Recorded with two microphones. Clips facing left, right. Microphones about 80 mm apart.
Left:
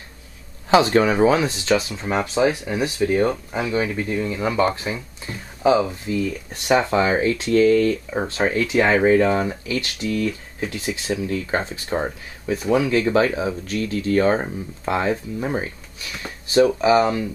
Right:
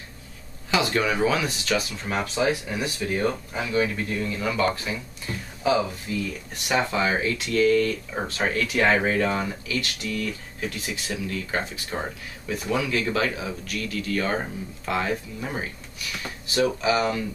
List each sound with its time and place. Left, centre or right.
0.7 s speech: left
16.8 s speech: left